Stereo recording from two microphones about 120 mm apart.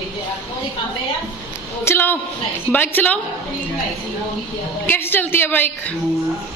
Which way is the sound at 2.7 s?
15° left (ahead or behind).